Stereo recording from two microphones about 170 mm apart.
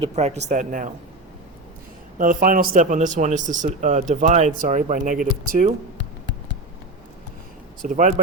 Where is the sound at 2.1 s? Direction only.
50° right (ahead or behind).